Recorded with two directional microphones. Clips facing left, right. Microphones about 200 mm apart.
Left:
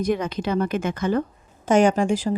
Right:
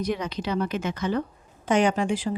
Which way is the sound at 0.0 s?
50° left (ahead or behind).